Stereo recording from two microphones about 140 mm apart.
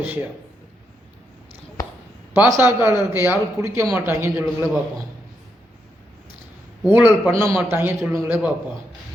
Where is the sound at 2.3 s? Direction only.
15° right (ahead or behind).